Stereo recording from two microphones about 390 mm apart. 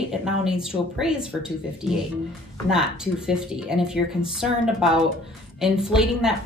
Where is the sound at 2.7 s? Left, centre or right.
Centre.